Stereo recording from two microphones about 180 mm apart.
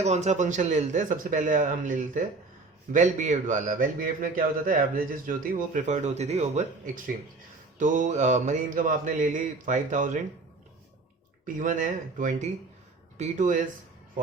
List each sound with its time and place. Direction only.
0.0 s a man's voice: 40° right (ahead or behind)
11.4 s a man's voice: 45° right (ahead or behind)